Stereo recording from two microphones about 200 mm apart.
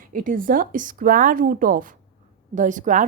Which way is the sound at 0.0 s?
45° right (ahead or behind).